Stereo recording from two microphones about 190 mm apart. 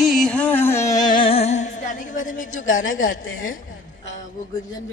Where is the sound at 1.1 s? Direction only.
30° left (ahead or behind).